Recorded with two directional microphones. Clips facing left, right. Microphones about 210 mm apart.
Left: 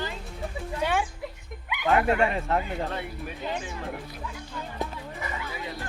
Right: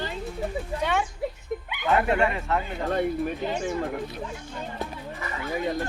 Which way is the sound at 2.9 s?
50° right (ahead or behind).